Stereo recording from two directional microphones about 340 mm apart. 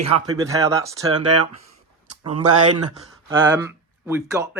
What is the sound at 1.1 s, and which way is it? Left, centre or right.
Speech, right.